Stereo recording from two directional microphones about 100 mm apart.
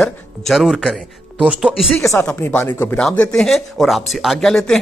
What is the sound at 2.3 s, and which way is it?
Speech, 20° left (ahead or behind).